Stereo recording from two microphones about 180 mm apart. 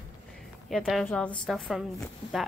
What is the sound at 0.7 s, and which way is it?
A woman's voice, centre (ahead or behind).